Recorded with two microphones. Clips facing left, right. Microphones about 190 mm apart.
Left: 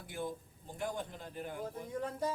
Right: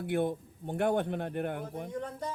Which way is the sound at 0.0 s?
65° right (ahead or behind).